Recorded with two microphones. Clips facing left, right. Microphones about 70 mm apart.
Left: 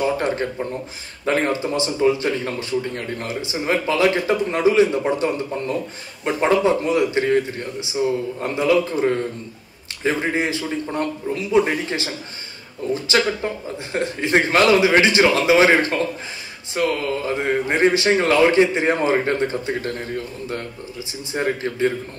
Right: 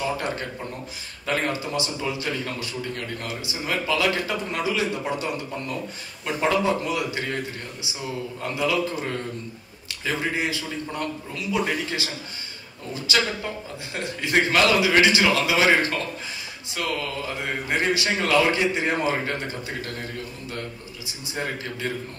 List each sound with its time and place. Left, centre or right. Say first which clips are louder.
0.0 s a man's voice: left 6 dB; left
21.3 s a man's voice: left 7 dB; left